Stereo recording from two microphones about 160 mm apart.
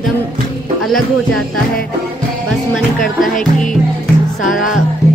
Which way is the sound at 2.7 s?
Centre (ahead or behind).